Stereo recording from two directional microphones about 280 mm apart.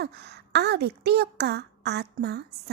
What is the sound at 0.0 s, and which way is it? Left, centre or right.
Speech, right.